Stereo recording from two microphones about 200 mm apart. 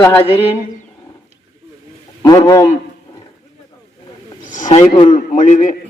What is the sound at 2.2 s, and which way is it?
Speech, 20° left (ahead or behind).